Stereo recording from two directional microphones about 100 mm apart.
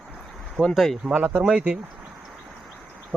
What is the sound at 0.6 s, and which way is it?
Speech, 5° left (ahead or behind).